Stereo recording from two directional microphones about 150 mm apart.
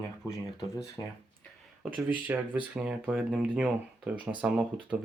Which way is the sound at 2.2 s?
10° right (ahead or behind).